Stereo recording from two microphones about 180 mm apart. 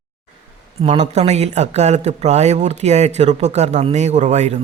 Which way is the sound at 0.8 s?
35° right (ahead or behind).